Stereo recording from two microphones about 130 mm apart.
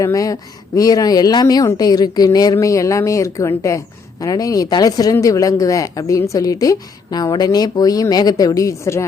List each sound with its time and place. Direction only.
0.0 s speech: 25° left (ahead or behind)